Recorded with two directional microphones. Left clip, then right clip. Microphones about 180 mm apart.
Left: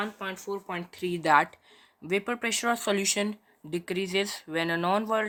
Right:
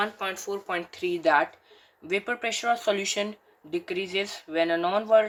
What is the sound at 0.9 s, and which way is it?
Speech, 35° left (ahead or behind).